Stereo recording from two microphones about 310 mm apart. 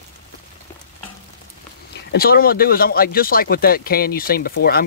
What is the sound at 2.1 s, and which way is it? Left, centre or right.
Speech, left.